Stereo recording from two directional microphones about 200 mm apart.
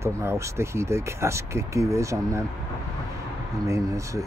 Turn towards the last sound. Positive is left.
turn(degrees=-15)  # may be behind; listen again after turning